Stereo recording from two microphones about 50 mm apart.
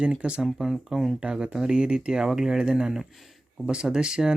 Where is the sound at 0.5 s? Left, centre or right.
Centre.